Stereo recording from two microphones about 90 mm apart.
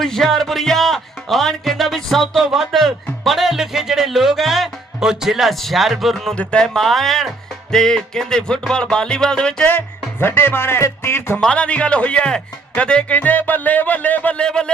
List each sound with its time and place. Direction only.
0.0 s speech: 5° left (ahead or behind)
9.7 s speech: 25° left (ahead or behind)
11.3 s speech: 10° left (ahead or behind)